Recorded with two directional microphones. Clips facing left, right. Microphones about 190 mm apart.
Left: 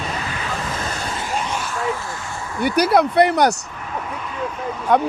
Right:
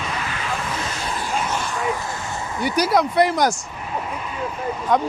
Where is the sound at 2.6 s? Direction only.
60° left (ahead or behind).